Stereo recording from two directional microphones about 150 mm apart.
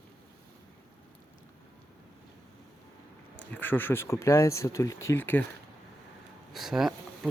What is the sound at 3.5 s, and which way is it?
Speech, 10° left (ahead or behind).